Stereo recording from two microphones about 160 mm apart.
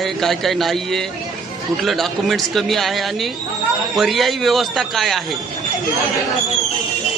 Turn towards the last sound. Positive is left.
turn(degrees=0)  # may be behind; listen again after turning